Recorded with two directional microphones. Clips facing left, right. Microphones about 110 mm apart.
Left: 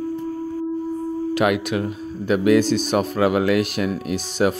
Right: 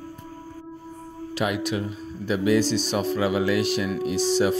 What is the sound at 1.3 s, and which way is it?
Speech, 65° left (ahead or behind).